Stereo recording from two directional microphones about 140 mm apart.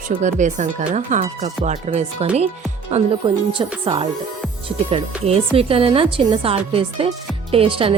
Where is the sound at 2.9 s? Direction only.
35° right (ahead or behind).